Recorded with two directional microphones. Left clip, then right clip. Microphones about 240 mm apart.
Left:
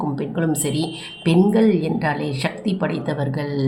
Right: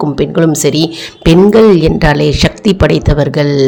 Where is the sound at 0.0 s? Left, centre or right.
Right.